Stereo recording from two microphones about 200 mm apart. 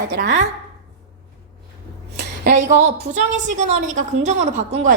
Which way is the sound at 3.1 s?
35° right (ahead or behind).